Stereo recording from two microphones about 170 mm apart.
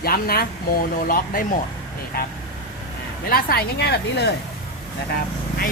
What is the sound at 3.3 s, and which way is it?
A woman's voice, 60° left (ahead or behind).